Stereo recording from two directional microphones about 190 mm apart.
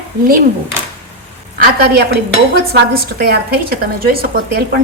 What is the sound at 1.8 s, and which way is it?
Dishes, 55° right (ahead or behind).